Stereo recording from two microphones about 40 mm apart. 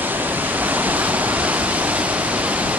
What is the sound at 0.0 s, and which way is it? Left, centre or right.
Waves, right.